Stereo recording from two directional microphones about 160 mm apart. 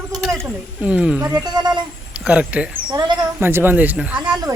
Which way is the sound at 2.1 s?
5° right (ahead or behind).